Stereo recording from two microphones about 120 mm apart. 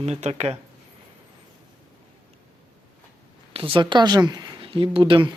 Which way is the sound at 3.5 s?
45° right (ahead or behind).